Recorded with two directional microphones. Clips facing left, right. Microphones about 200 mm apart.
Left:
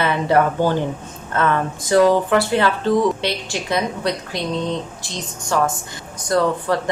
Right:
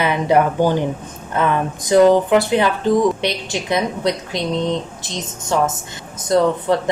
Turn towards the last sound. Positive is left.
turn(degrees=-20)  # may be behind; listen again after turning